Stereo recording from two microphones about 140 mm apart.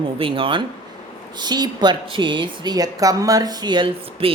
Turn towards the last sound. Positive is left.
turn(degrees=-35)  # may be behind; listen again after turning